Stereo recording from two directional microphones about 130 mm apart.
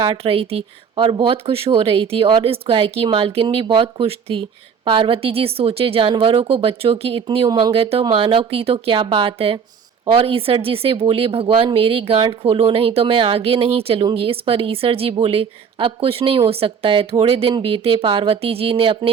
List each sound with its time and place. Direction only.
0.0 s speech: 45° right (ahead or behind)